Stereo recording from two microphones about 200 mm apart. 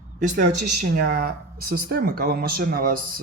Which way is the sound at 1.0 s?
45° right (ahead or behind).